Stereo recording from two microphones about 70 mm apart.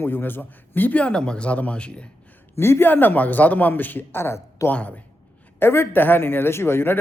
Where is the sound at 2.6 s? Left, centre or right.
Left.